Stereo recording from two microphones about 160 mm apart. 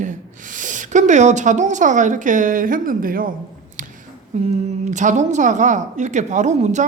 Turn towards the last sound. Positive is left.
turn(degrees=-45)  # may be behind; listen again after turning